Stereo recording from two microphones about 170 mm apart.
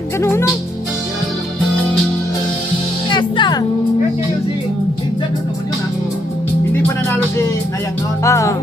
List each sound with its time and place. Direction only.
0.2 s music: 15° left (ahead or behind)
3.1 s music: 25° left (ahead or behind)
8.2 s music: 15° left (ahead or behind)